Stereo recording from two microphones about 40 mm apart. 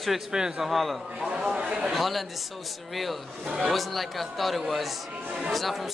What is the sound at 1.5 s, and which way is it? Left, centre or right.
Speech, right.